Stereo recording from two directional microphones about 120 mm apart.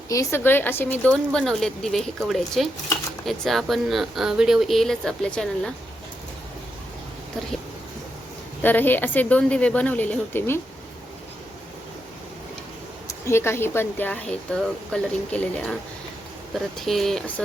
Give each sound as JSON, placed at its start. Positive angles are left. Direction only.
{"t": 0.1, "sound": "speech", "side_deg": 25}
{"t": 8.6, "sound": "speech", "side_deg": 15}
{"t": 13.1, "sound": "speech", "side_deg": 20}
{"t": 16.8, "sound": "speech", "side_deg": 0}